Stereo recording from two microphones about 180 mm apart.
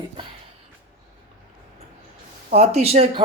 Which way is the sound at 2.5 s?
35° right (ahead or behind).